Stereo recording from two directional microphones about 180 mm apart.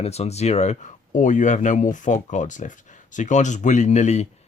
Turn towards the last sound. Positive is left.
turn(degrees=40)  # may be behind; listen again after turning